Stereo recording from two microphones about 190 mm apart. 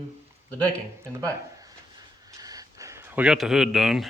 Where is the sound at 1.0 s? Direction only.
15° right (ahead or behind).